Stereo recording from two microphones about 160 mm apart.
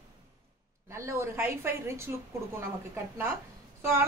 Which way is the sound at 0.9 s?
15° right (ahead or behind).